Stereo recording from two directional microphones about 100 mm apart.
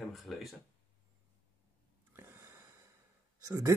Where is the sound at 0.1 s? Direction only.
Centre (ahead or behind).